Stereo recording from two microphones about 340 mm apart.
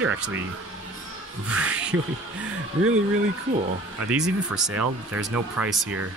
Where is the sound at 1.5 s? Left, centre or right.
Centre.